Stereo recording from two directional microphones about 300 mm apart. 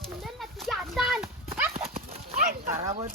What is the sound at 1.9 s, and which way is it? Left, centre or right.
Clip-clop, right.